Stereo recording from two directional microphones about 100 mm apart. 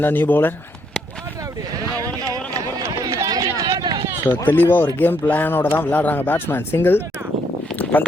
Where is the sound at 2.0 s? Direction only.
35° right (ahead or behind).